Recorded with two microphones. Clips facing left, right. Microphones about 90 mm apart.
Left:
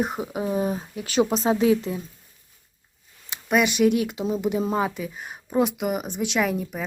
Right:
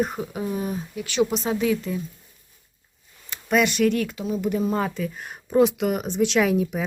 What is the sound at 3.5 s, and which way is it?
Speech, 10° left (ahead or behind).